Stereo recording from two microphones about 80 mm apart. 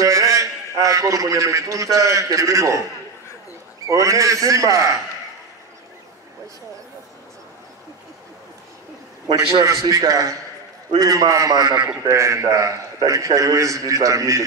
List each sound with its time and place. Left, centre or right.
0.0 s a man's voice: right
3.9 s a man's voice: right
9.3 s a man's voice: right
12.1 s a man's voice: right